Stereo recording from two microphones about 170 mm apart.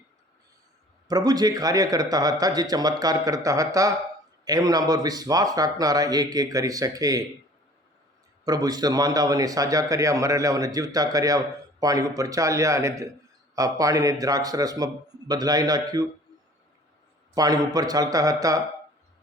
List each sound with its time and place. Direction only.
1.0 s a man's voice: 25° right (ahead or behind)
8.4 s a man's voice: 25° right (ahead or behind)
17.3 s a man's voice: 20° right (ahead or behind)